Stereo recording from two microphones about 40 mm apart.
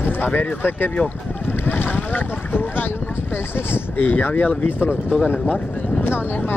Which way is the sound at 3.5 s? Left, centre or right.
Left.